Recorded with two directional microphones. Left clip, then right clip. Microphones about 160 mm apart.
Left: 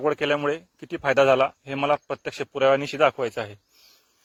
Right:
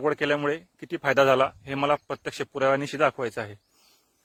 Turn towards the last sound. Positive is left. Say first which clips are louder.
# left 3 dB
turn(degrees=-10)  # may be behind; listen again after turning